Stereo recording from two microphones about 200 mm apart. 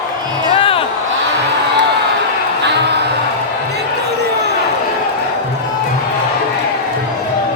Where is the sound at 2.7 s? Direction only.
60° right (ahead or behind).